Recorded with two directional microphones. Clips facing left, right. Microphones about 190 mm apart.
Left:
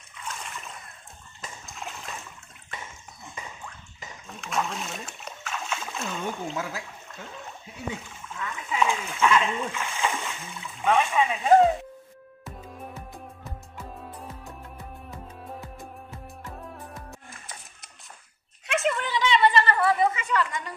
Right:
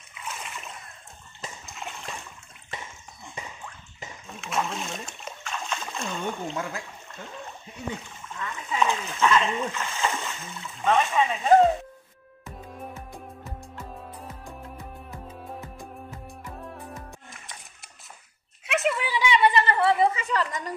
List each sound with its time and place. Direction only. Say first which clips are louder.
0.1 s a sound: even; 5° right (ahead or behind)
1.7 s splash: even; centre (ahead or behind)
4.3 s splash: even; centre (ahead or behind)
9.7 s speech: even; 10° left (ahead or behind)
13.7 s music: left 2 dB; centre (ahead or behind)
16.7 s music: right 1 dB; centre (ahead or behind)
18.7 s a sound: even; 5° right (ahead or behind); by 20.7 s 40° right (ahead or behind)